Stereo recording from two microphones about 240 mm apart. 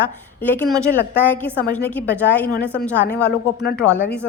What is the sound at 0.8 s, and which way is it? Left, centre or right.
A woman's voice, centre.